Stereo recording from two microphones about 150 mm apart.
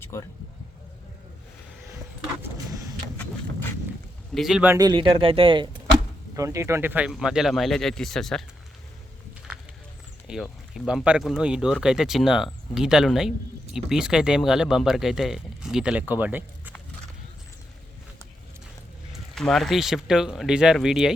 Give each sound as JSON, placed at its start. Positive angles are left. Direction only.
{"t": 0.1, "sound": "speech", "side_deg": 20}
{"t": 3.2, "sound": "a sound", "side_deg": 15}
{"t": 4.4, "sound": "speech", "side_deg": -5}
{"t": 4.8, "sound": "speech", "side_deg": -30}
{"t": 6.3, "sound": "speech", "side_deg": -20}
{"t": 10.2, "sound": "speech", "side_deg": -5}
{"t": 19.3, "sound": "speech", "side_deg": 5}